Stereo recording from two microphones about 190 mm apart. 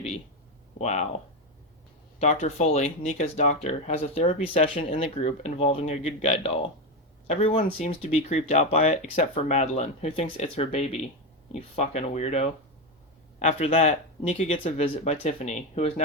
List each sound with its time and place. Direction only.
0.8 s speech: 35° left (ahead or behind)
2.2 s speech: 35° left (ahead or behind)